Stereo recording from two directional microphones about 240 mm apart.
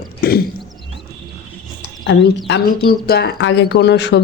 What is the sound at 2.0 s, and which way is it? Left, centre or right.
Speech, left.